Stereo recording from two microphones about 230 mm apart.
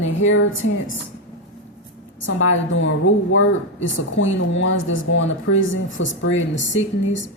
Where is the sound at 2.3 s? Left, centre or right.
Left.